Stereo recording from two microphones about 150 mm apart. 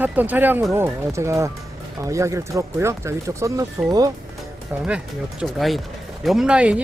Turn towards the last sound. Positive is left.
turn(degrees=-5)  # may be behind; listen again after turning